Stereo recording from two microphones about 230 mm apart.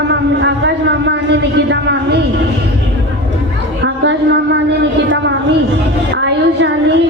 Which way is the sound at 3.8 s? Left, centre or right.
Right.